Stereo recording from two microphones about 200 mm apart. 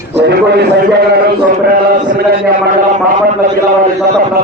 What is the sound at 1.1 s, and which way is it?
A man's voice, 50° right (ahead or behind).